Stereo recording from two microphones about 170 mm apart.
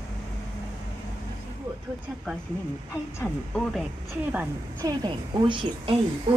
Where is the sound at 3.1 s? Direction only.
5° left (ahead or behind).